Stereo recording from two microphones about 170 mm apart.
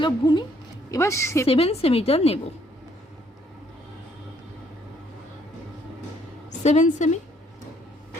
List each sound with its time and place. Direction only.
0.0 s a woman's voice: 25° left (ahead or behind)
1.5 s a woman's voice: 35° left (ahead or behind)
6.5 s a woman's voice: 45° left (ahead or behind)